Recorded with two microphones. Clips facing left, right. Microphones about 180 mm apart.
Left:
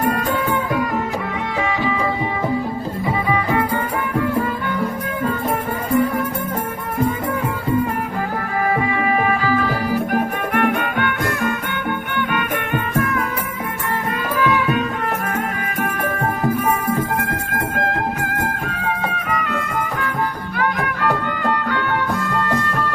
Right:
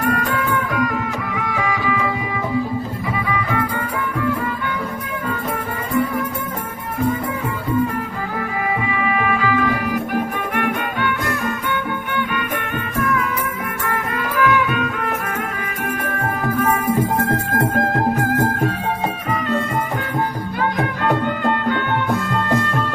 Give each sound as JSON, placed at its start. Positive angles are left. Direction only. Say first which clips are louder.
{"t": 1.5, "sound": "music", "louder": "left 1 dB", "side_deg": 25}
{"t": 9.0, "sound": "music", "louder": "even", "side_deg": 35}
{"t": 19.3, "sound": "music", "louder": "right 3 dB", "side_deg": -30}
{"t": 20.6, "sound": "music", "louder": "even", "side_deg": -25}